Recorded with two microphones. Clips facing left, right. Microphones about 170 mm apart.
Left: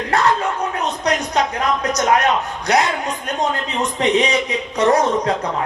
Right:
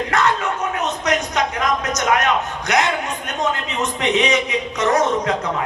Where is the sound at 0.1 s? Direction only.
35° left (ahead or behind).